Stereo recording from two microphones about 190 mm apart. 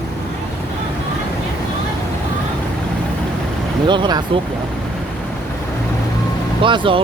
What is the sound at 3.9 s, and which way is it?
Speech, 25° right (ahead or behind).